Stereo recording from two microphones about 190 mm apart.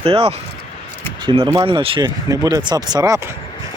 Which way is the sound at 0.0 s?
30° right (ahead or behind).